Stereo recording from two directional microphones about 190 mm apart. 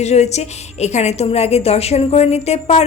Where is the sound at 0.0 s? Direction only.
35° left (ahead or behind).